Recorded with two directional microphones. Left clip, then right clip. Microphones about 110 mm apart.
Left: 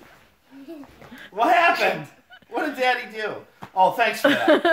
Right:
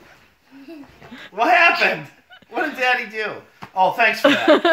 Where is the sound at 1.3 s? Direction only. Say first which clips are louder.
Right 3 dB; 10° left (ahead or behind).